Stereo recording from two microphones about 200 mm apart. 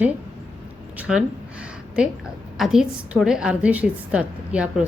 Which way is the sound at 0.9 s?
5° right (ahead or behind).